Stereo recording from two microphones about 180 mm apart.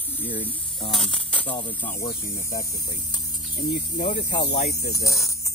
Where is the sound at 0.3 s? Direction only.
30° left (ahead or behind).